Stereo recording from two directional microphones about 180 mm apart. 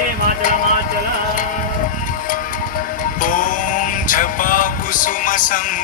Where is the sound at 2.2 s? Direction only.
50° left (ahead or behind).